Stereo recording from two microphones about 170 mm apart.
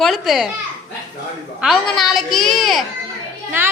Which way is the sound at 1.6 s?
Centre (ahead or behind).